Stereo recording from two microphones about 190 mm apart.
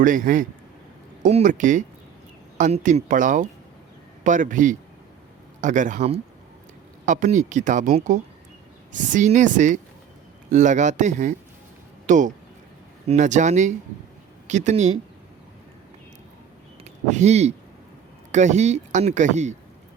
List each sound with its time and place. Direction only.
0.0 s speech: 45° right (ahead or behind)
16.8 s speech: 35° right (ahead or behind)